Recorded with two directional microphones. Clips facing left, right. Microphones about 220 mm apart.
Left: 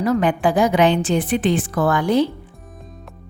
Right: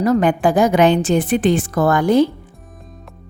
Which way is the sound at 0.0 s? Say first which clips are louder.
Right 3 dB; 45° right (ahead or behind).